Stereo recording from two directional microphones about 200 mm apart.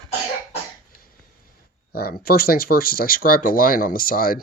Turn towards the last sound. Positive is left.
turn(degrees=45)  # may be behind; listen again after turning